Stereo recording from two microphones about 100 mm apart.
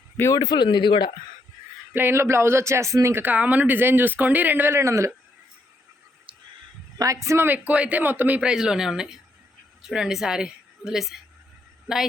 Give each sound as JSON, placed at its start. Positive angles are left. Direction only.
{"t": 0.3, "sound": "speech", "side_deg": 45}
{"t": 1.9, "sound": "speech", "side_deg": -20}
{"t": 6.3, "sound": "a sound", "side_deg": -60}
{"t": 7.0, "sound": "a woman's voice", "side_deg": -30}
{"t": 7.4, "sound": "a woman's voice", "side_deg": -15}